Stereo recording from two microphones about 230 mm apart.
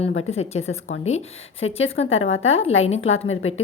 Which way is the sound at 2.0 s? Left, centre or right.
Left.